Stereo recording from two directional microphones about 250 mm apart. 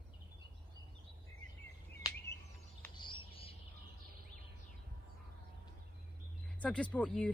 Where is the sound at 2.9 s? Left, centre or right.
Centre.